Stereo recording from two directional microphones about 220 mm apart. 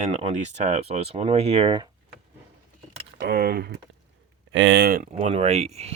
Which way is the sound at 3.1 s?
45° right (ahead or behind).